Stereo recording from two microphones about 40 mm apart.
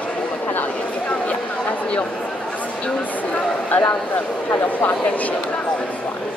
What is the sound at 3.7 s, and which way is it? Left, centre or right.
Speech, left.